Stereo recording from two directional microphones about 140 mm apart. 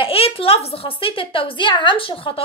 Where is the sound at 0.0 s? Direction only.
40° left (ahead or behind).